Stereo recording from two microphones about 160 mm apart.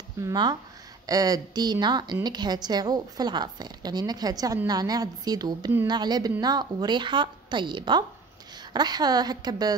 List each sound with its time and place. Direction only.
0.2 s speech: 25° right (ahead or behind)